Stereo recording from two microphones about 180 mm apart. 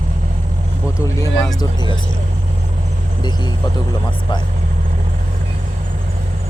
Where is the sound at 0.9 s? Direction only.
15° left (ahead or behind).